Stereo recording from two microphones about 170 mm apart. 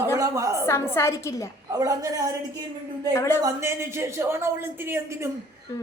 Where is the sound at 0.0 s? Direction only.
15° right (ahead or behind).